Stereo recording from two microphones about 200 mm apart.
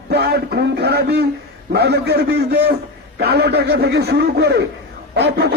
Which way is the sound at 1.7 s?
55° right (ahead or behind).